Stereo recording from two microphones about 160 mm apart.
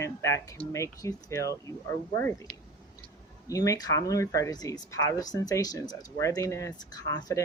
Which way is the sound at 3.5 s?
20° left (ahead or behind).